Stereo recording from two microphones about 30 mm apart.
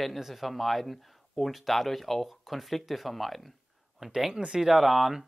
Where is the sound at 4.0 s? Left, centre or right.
Centre.